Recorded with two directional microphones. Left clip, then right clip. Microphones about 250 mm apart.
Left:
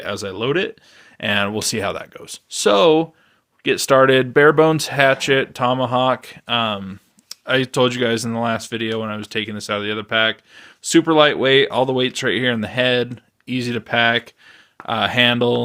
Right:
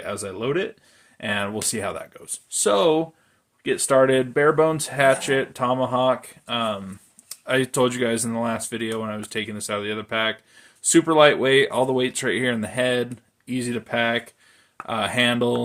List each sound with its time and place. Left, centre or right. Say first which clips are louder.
0.0 s speech: left 4 dB; left